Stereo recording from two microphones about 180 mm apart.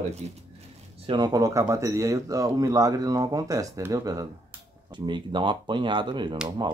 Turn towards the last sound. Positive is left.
turn(degrees=-25)  # may be behind; listen again after turning